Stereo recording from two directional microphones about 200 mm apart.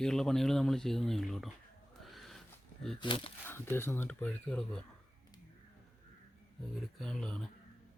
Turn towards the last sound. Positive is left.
turn(degrees=0)  # may be behind; listen again after turning